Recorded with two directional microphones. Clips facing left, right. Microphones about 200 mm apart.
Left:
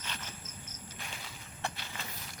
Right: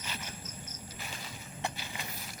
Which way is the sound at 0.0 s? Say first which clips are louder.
Right 2 dB; 10° right (ahead or behind).